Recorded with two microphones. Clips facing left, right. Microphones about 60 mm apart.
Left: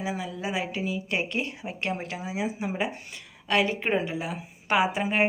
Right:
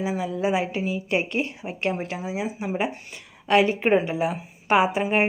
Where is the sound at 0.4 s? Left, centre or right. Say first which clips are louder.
Right 5 dB; centre.